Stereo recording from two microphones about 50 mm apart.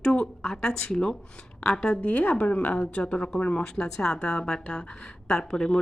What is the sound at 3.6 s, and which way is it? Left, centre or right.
A woman's voice, centre.